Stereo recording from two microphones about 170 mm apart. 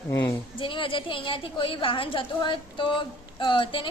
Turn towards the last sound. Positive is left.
turn(degrees=30)  # may be behind; listen again after turning